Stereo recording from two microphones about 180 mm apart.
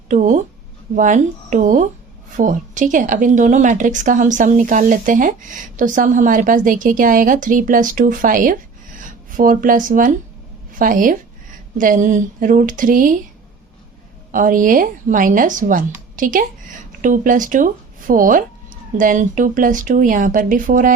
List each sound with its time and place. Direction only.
0.1 s a woman's voice: 45° right (ahead or behind)
14.3 s a woman's voice: 50° right (ahead or behind)